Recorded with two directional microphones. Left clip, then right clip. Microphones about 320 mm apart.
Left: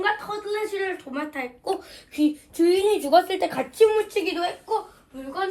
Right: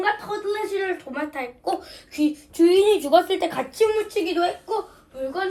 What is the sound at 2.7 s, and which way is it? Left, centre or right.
Speech, centre.